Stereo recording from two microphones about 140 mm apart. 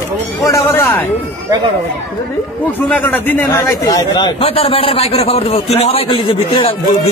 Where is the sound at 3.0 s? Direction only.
15° left (ahead or behind); by 6.8 s 40° left (ahead or behind).